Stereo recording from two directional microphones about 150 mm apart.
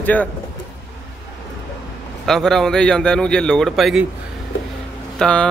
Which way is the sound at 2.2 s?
Centre (ahead or behind).